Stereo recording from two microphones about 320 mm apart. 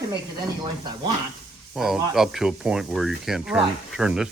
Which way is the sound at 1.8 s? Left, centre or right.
Centre.